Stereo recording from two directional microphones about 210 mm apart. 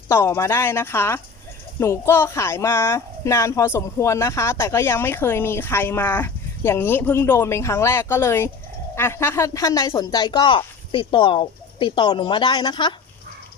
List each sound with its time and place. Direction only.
0.1 s a woman's voice: 10° left (ahead or behind)